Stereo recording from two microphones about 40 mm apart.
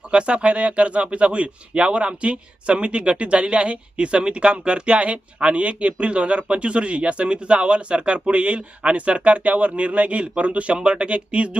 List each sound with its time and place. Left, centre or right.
0.1 s speech: right